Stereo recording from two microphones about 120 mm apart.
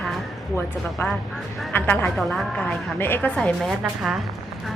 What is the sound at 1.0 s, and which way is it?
Speech, 20° left (ahead or behind).